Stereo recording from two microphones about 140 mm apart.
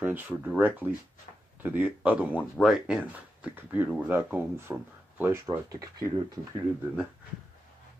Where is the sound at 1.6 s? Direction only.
15° right (ahead or behind).